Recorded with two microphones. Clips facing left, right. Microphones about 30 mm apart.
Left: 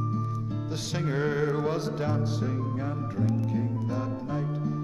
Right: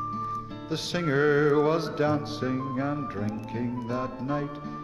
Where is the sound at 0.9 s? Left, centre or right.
Right.